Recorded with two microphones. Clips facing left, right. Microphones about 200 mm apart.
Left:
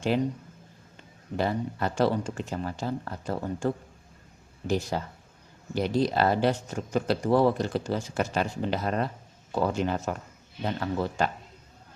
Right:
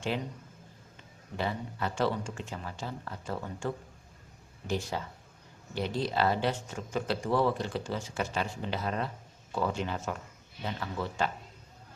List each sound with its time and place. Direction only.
1.4 s speech: 40° left (ahead or behind)
4.7 s speech: 40° left (ahead or behind)